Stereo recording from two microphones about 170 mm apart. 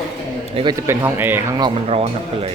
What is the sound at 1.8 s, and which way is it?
Speech, 35° right (ahead or behind).